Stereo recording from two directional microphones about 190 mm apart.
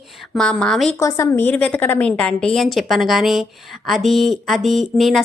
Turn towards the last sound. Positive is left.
turn(degrees=0)  # may be behind; listen again after turning